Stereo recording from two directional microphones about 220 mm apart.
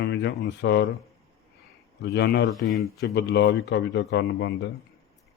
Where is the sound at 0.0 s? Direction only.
50° left (ahead or behind).